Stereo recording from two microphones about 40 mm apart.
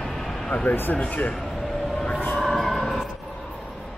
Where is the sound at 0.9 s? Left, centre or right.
Left.